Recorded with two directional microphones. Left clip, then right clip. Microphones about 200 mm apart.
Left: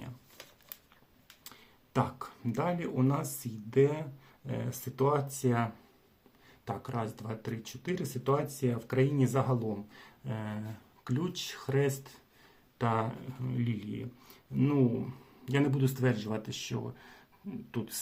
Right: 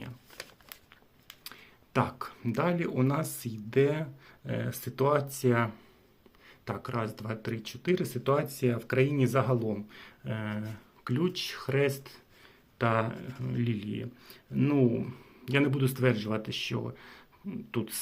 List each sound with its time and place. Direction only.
1.5 s speech: 10° right (ahead or behind)
6.7 s speech: 10° right (ahead or behind)